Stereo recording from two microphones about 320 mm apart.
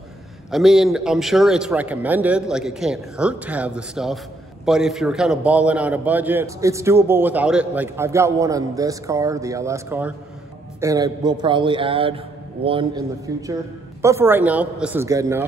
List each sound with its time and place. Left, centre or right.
0.5 s a man's voice: centre